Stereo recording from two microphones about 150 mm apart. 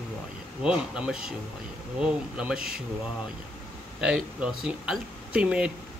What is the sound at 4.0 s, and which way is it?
Speech, 5° right (ahead or behind).